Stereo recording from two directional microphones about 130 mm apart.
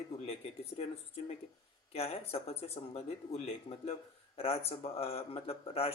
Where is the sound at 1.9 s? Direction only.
50° left (ahead or behind).